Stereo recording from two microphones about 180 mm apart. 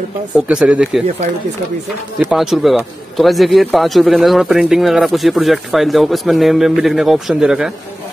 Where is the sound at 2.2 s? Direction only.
Centre (ahead or behind).